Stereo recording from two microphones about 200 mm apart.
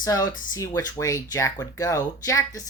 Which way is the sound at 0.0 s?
15° left (ahead or behind).